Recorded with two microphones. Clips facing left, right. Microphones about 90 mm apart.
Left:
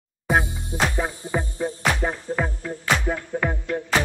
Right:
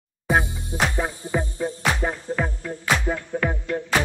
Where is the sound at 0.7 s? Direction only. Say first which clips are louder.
Even; 25° right (ahead or behind).